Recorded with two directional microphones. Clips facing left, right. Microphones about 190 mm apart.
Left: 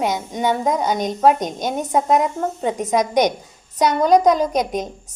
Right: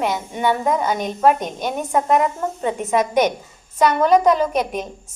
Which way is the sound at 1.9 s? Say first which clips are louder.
Even; 15° left (ahead or behind).